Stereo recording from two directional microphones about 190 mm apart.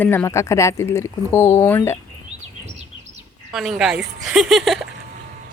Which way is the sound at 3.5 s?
Centre (ahead or behind).